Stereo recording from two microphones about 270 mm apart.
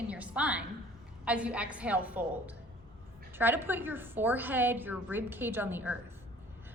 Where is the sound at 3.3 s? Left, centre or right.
Centre.